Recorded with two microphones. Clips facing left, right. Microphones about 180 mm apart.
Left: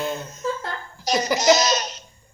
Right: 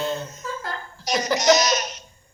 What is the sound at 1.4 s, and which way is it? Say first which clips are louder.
Laughter: even; 30° left (ahead or behind).